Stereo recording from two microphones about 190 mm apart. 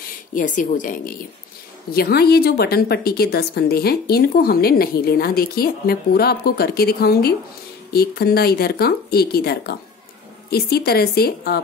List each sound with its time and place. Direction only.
0.3 s speech: 45° left (ahead or behind)
1.9 s a woman's voice: 55° left (ahead or behind)